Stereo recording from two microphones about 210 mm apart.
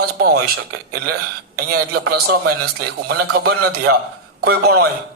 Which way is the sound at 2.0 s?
50° right (ahead or behind).